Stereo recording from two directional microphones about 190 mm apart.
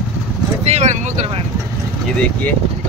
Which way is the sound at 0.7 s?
35° right (ahead or behind).